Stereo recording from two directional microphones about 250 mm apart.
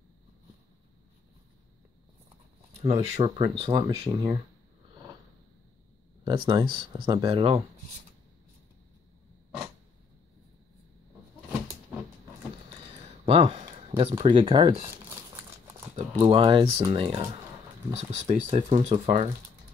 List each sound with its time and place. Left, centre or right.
2.8 s speech: right
6.2 s speech: centre
13.2 s speech: right
16.0 s speech: right